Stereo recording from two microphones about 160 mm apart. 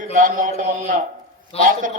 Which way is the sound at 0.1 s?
55° right (ahead or behind).